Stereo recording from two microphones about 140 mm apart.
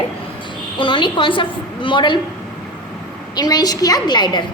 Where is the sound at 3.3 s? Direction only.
30° left (ahead or behind).